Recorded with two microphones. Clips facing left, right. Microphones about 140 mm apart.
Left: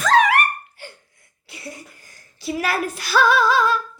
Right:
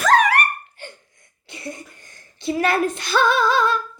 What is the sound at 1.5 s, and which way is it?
A woman's voice, 5° left (ahead or behind).